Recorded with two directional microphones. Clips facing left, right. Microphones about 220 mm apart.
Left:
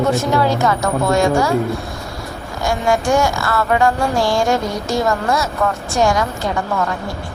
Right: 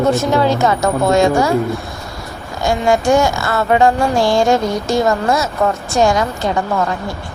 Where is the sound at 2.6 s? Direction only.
20° right (ahead or behind).